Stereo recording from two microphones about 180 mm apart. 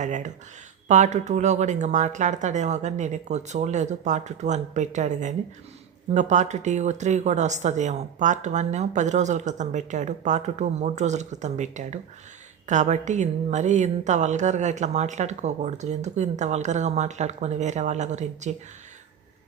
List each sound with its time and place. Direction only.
0.0 s a woman's voice: 40° right (ahead or behind)